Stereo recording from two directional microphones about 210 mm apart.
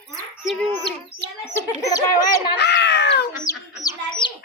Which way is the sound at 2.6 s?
55° left (ahead or behind).